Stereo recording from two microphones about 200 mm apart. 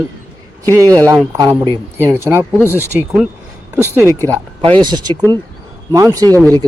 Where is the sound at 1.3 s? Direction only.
20° right (ahead or behind).